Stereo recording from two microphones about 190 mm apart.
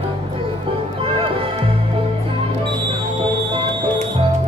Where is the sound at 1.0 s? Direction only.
30° right (ahead or behind).